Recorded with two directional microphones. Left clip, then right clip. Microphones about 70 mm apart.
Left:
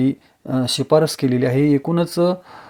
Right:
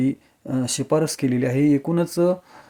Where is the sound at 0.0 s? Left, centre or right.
Left.